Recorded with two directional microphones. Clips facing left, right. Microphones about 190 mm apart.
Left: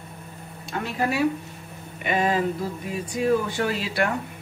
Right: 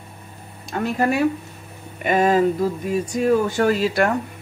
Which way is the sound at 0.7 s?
50° right (ahead or behind).